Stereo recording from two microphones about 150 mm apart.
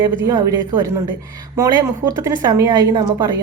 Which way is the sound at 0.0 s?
25° right (ahead or behind).